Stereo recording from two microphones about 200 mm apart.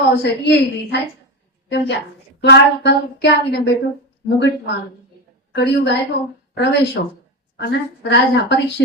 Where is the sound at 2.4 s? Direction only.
55° left (ahead or behind).